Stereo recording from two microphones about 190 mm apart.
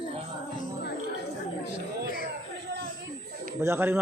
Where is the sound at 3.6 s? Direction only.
15° right (ahead or behind).